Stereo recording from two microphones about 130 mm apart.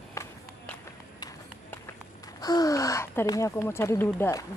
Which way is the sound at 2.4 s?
30° left (ahead or behind).